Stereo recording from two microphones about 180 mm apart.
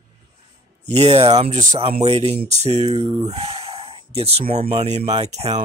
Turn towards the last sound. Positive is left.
turn(degrees=-35)  # may be behind; listen again after turning